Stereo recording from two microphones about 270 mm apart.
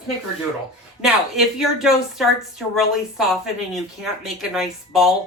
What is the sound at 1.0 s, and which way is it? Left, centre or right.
Speech, centre.